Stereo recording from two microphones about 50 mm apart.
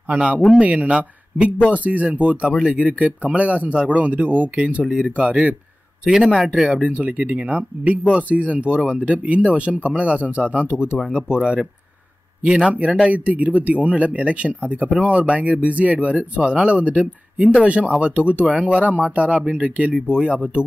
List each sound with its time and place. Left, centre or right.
0.1 s speech: right
2.9 s speech: right
4.8 s speech: centre
5.1 s speech: right
6.0 s speech: centre
6.9 s speech: right
12.7 s speech: right